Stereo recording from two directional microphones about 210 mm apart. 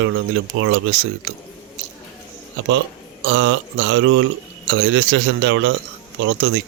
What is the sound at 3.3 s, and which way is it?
Speech, 60° right (ahead or behind).